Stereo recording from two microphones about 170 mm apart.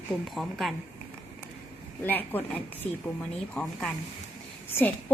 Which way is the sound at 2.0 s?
10° left (ahead or behind).